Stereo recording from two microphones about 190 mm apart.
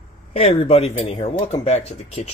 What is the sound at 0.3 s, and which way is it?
Speech, 35° left (ahead or behind).